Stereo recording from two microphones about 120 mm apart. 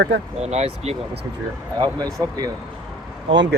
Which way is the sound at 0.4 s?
60° right (ahead or behind).